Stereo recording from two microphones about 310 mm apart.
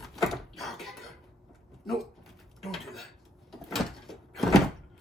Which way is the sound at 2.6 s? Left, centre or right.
Centre.